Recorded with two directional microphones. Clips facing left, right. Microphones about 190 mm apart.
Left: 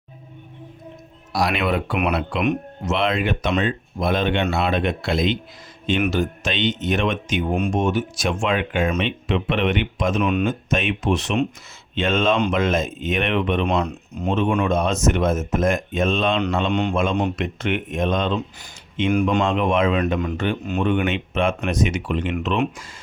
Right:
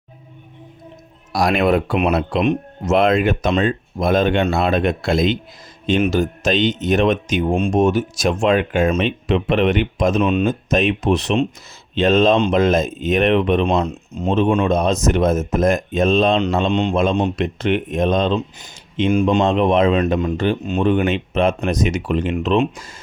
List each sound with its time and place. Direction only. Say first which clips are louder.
1.3 s speech: right 5 dB; 50° right (ahead or behind)
10.2 s speech: right 2 dB; 25° right (ahead or behind)
10.4 s speech: right 5 dB; 40° right (ahead or behind)
13.8 s speech: right 3 dB; 25° right (ahead or behind)
19.5 s speech: right 4 dB; 35° right (ahead or behind)
20.7 s speech: right 3 dB; 25° right (ahead or behind)
20.9 s speech: right 4 dB; 35° right (ahead or behind)
22.4 s speech: right 6 dB; 25° right (ahead or behind)